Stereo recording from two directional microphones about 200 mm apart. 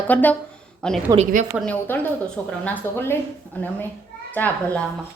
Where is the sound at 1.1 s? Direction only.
35° right (ahead or behind).